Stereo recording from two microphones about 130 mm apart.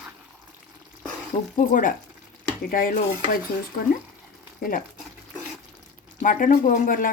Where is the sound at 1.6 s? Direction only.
90° left.